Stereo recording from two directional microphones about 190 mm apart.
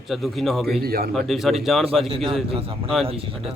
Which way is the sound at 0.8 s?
55° right (ahead or behind).